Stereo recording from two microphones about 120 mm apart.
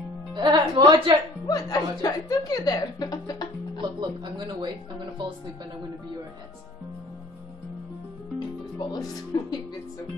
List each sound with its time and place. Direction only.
0.3 s speech: 40° right (ahead or behind)
1.5 s speech: 30° left (ahead or behind)
3.8 s speech: 40° right (ahead or behind)
8.7 s speech: 30° left (ahead or behind)